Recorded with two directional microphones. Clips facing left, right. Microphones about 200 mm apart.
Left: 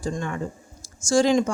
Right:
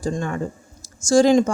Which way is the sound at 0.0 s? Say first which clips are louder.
Right 4 dB; 40° right (ahead or behind).